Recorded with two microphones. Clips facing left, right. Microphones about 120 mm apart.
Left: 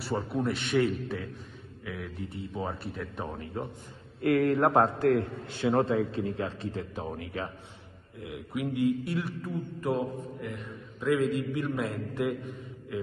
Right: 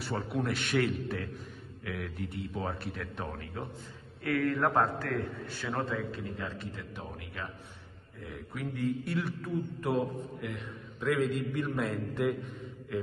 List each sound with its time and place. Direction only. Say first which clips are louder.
0.0 s a man's voice: left 3 dB; centre (ahead or behind)
4.2 s a man's voice: left 5 dB; 25° left (ahead or behind)
9.0 s a man's voice: left 1 dB; centre (ahead or behind)